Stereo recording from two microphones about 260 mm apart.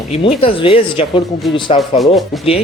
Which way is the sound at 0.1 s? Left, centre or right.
Left.